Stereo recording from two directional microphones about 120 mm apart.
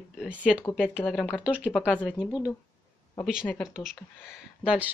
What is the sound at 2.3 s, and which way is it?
Speech, 30° left (ahead or behind).